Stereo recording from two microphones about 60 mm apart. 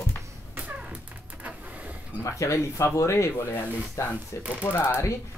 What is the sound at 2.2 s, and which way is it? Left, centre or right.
Speech, left.